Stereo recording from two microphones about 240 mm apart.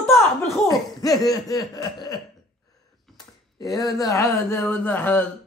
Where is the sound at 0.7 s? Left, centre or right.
Centre.